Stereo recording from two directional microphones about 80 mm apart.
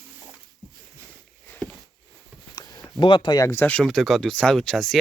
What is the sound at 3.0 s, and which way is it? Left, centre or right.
Speech, left.